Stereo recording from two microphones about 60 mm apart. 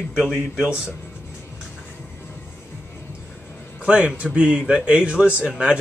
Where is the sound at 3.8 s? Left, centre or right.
Centre.